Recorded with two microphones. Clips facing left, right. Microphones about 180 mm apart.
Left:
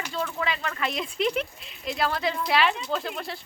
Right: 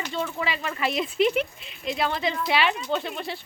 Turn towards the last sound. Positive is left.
turn(degrees=0)  # may be behind; listen again after turning